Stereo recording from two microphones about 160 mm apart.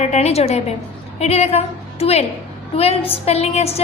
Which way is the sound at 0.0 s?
45° left (ahead or behind).